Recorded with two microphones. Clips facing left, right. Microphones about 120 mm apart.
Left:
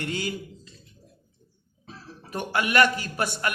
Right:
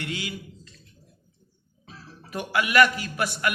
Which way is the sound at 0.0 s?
40° left (ahead or behind).